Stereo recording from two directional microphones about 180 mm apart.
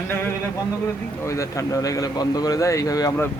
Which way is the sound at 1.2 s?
15° left (ahead or behind).